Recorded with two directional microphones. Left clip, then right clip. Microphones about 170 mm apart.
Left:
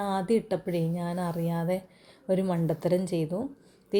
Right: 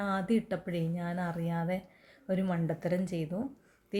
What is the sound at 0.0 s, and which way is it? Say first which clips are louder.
A woman's voice: left 5 dB; 10° left (ahead or behind).